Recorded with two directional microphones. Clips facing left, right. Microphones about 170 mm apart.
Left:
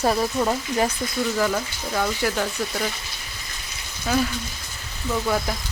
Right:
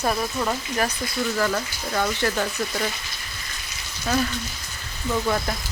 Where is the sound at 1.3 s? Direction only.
5° left (ahead or behind).